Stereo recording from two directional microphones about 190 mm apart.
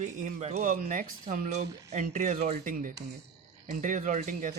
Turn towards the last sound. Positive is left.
turn(degrees=-45)  # may be behind; listen again after turning